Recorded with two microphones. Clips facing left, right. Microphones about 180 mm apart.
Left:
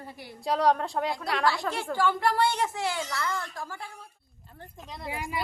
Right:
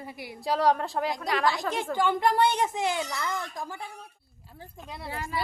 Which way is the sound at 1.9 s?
20° right (ahead or behind).